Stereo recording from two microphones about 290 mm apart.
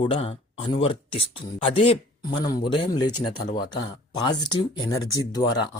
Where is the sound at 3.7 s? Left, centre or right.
Centre.